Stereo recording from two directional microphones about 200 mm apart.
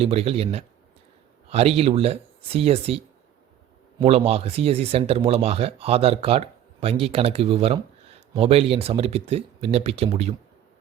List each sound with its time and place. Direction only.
0.0 s speech: 30° right (ahead or behind)
4.0 s speech: 30° right (ahead or behind)